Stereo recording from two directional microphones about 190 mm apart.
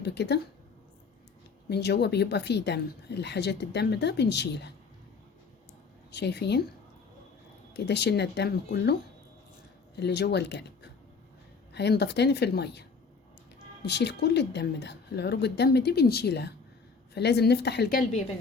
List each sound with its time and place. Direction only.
0.0 s speech: 65° left (ahead or behind)
1.7 s speech: 60° left (ahead or behind)
6.1 s speech: 60° left (ahead or behind)
7.7 s speech: 65° left (ahead or behind)
10.0 s speech: 60° left (ahead or behind)
11.7 s speech: 60° left (ahead or behind)
13.8 s speech: 60° left (ahead or behind)